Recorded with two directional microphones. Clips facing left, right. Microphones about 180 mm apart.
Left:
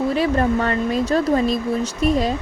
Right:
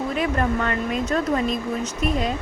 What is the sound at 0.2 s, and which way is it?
Speech, 30° left (ahead or behind).